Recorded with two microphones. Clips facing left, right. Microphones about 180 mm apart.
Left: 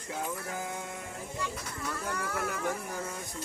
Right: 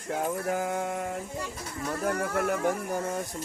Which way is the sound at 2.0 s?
50° right (ahead or behind).